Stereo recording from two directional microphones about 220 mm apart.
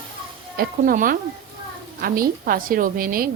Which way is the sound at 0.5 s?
40° right (ahead or behind).